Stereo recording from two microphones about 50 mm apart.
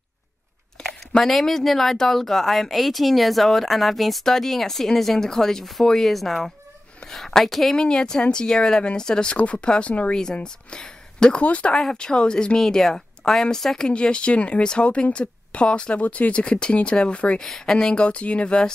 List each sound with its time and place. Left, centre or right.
0.8 s a sound: centre
1.2 s a woman's voice: centre
7.7 s speech: centre
11.4 s speech: left
11.7 s speech: centre
17.4 s speech: centre